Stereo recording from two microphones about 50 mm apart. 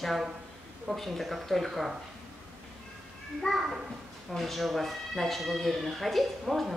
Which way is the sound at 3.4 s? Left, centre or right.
Centre.